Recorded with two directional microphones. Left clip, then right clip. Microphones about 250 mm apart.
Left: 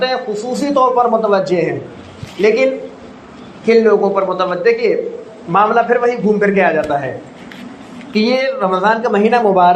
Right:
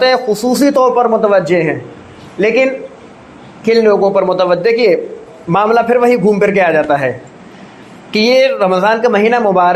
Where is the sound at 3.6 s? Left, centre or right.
Right.